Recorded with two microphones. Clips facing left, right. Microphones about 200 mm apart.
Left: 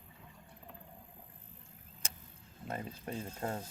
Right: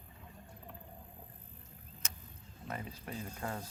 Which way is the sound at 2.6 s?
25° left (ahead or behind).